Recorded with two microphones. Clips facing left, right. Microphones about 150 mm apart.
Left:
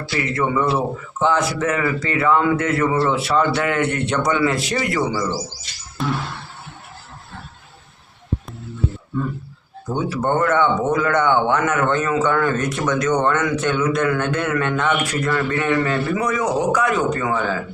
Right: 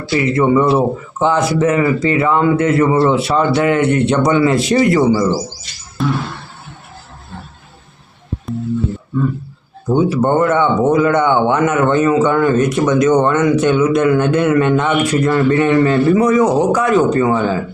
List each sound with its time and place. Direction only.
0.1 s speech: 20° right (ahead or behind)
9.9 s speech: 15° right (ahead or behind)